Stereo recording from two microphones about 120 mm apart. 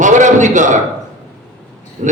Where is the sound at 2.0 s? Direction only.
90° right.